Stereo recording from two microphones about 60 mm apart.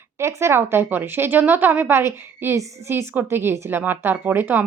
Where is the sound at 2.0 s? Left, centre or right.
Right.